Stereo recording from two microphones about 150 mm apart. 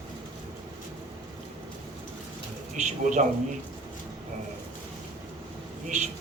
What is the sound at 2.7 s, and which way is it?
Speech, 55° right (ahead or behind).